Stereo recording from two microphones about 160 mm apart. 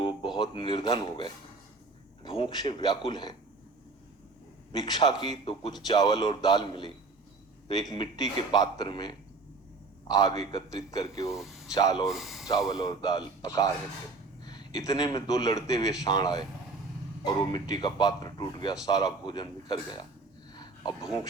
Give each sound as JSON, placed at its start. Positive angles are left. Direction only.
{"t": 0.3, "sound": "speech", "side_deg": 30}
{"t": 4.9, "sound": "speech", "side_deg": 25}
{"t": 11.3, "sound": "speech", "side_deg": 0}
{"t": 11.7, "sound": "speech", "side_deg": 25}
{"t": 12.0, "sound": "speech", "side_deg": 0}
{"t": 12.5, "sound": "speech", "side_deg": 20}
{"t": 20.5, "sound": "a sound", "side_deg": 25}